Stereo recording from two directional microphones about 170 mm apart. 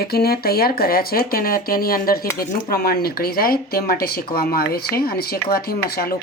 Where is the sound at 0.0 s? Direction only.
65° left (ahead or behind).